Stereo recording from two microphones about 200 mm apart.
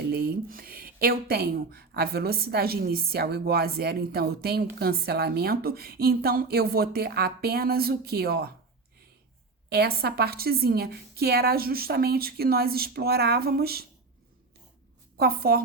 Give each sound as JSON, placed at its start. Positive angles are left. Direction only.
{"t": 0.1, "sound": "speech", "side_deg": -50}
{"t": 9.6, "sound": "speech", "side_deg": -50}
{"t": 15.2, "sound": "speech", "side_deg": -50}